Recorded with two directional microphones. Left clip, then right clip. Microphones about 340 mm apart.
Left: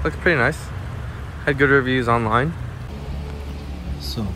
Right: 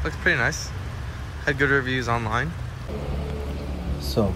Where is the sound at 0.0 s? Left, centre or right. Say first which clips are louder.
Left 4 dB; centre.